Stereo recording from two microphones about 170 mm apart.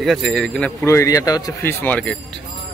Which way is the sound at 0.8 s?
15° left (ahead or behind).